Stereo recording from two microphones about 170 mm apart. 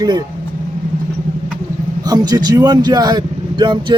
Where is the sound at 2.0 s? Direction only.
20° right (ahead or behind).